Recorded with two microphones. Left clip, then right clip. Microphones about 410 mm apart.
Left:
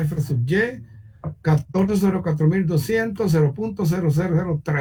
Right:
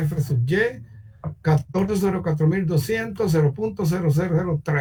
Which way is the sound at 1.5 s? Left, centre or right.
Centre.